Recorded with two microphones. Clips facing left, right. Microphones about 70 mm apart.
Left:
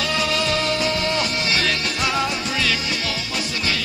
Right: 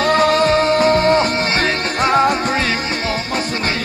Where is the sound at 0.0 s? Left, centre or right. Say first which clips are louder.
Right 9 dB; right.